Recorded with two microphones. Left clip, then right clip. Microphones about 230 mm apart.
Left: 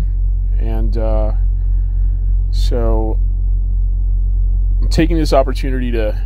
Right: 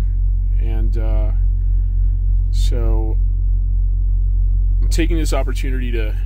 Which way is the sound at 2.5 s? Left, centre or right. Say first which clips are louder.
Left 8 dB; centre.